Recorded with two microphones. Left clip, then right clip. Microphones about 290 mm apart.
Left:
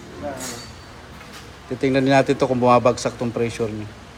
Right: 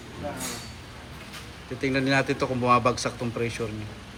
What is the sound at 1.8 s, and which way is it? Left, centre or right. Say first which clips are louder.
A man's voice: left 7 dB; centre.